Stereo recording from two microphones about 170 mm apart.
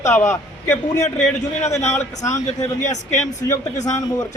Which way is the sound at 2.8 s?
45° left (ahead or behind).